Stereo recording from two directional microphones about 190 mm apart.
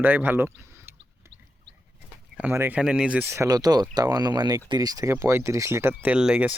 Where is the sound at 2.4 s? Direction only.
10° right (ahead or behind).